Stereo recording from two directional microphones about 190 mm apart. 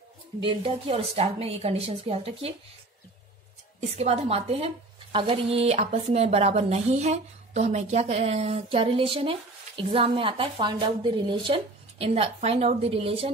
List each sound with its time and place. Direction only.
0.4 s speech: 30° right (ahead or behind)
4.0 s speech: 30° right (ahead or behind)